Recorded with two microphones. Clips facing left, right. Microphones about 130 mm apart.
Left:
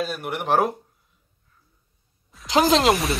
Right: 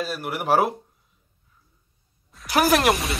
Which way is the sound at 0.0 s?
Centre (ahead or behind).